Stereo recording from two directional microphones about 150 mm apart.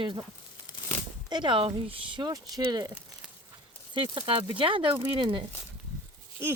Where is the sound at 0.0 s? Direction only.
30° right (ahead or behind).